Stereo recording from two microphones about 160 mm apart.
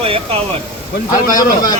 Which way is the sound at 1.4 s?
25° left (ahead or behind).